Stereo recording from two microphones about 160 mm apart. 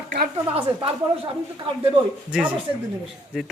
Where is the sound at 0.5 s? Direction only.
35° right (ahead or behind).